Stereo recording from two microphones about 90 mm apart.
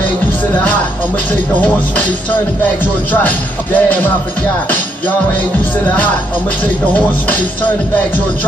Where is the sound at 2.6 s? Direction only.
20° left (ahead or behind).